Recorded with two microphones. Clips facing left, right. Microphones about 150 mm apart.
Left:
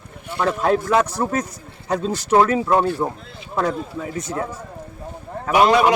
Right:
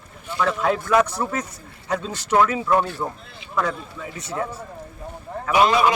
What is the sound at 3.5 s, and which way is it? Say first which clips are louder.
Speech: left 3 dB; 40° left (ahead or behind).